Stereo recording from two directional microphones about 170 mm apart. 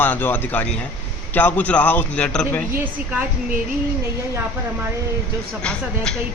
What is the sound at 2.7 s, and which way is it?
Speech, 10° right (ahead or behind).